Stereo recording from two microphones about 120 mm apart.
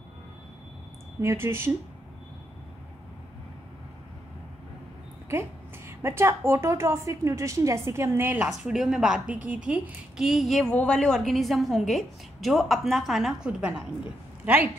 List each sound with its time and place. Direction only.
1.2 s a woman's voice: 20° right (ahead or behind)
5.3 s a woman's voice: 20° right (ahead or behind)
8.5 s a woman's voice: 5° right (ahead or behind)